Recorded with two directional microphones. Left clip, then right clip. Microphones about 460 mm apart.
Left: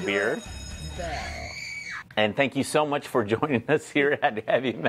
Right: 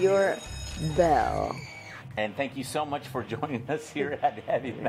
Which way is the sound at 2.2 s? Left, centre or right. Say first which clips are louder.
Left 7 dB; left.